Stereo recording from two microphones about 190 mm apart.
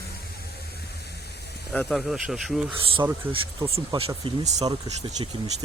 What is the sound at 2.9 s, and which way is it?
Speech, 25° right (ahead or behind).